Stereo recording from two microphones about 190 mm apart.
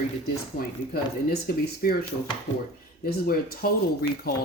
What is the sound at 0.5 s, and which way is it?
Speech, 55° left (ahead or behind).